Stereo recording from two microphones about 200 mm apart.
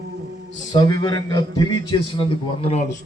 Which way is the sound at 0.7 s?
20° left (ahead or behind).